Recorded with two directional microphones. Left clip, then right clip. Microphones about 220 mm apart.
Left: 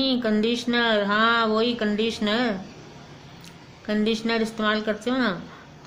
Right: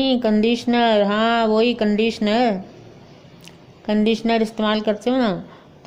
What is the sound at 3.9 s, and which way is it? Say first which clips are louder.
Speech: right 5 dB; 35° right (ahead or behind).